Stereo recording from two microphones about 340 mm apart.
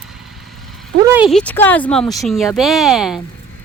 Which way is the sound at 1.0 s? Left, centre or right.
Centre.